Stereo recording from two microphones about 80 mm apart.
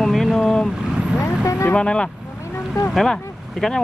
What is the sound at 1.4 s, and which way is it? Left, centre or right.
Vehicle, left.